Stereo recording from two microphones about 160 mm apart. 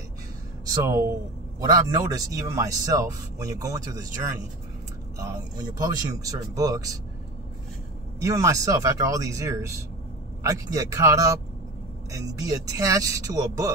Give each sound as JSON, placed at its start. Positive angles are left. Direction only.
{"t": 0.7, "sound": "speech", "side_deg": -20}
{"t": 5.1, "sound": "speech", "side_deg": -20}
{"t": 8.2, "sound": "speech", "side_deg": -20}